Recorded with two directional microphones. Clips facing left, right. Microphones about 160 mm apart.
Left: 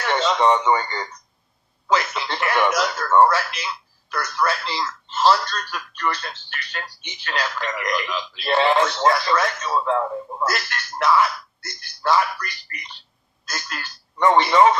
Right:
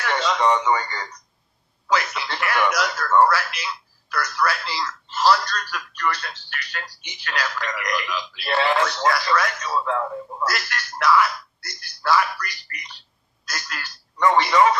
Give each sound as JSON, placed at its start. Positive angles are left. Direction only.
{"t": 0.0, "sound": "speech", "side_deg": 25}
{"t": 1.9, "sound": "telephone", "side_deg": 25}
{"t": 4.1, "sound": "speech", "side_deg": 25}